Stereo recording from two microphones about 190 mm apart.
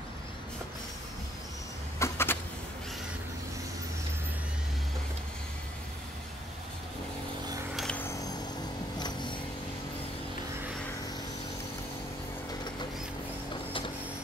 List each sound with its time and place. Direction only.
2.0 s vehicle: 10° left (ahead or behind)
7.7 s a sound: 5° left (ahead or behind)
9.0 s vehicle: 25° left (ahead or behind)